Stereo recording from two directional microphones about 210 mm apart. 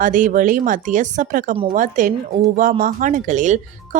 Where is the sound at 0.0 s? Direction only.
40° right (ahead or behind).